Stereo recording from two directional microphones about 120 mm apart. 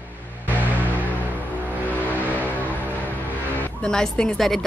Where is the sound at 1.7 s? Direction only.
15° left (ahead or behind).